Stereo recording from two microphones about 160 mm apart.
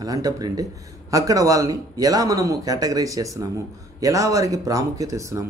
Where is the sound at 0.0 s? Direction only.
25° right (ahead or behind).